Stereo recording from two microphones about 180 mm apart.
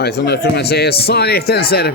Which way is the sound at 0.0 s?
65° left (ahead or behind).